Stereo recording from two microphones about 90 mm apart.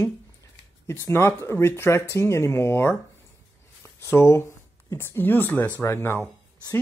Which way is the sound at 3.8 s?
30° left (ahead or behind).